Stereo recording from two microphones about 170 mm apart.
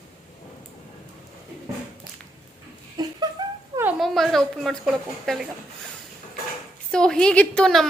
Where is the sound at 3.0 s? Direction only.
25° right (ahead or behind).